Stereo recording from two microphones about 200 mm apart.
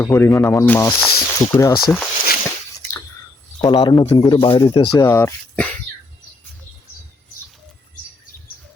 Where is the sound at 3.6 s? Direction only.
25° left (ahead or behind).